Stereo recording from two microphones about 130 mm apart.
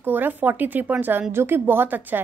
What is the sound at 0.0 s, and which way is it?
A woman's voice, 15° right (ahead or behind).